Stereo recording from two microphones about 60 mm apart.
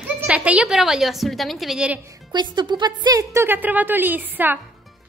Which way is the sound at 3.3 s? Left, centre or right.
Right.